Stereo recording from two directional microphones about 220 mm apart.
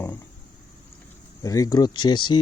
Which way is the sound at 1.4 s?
15° left (ahead or behind).